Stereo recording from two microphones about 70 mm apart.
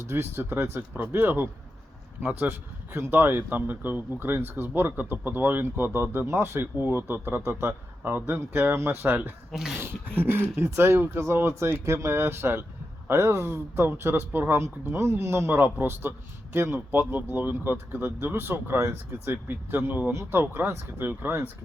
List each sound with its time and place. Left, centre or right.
0.0 s a man's voice: right
9.5 s speech: centre
10.2 s a man's voice: right
14.6 s a man's voice: right